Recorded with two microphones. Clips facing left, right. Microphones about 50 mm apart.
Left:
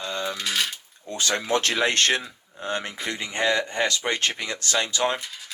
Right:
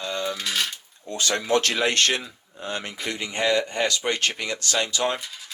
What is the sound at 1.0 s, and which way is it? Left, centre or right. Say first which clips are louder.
Speech: right 1 dB; left.